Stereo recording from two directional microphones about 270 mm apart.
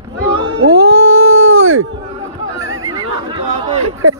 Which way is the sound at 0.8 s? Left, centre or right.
Right.